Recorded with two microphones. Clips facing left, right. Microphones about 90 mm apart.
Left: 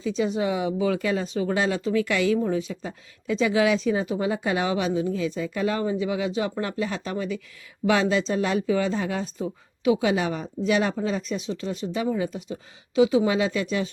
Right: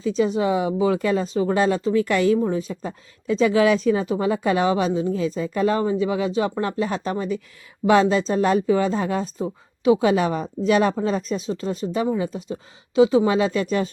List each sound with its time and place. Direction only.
0.0 s speech: 35° right (ahead or behind)